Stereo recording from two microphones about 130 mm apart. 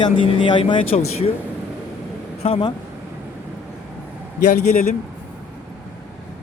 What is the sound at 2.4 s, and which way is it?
Speech, 45° left (ahead or behind).